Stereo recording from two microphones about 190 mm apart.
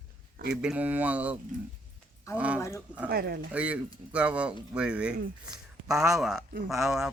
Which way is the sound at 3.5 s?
5° right (ahead or behind).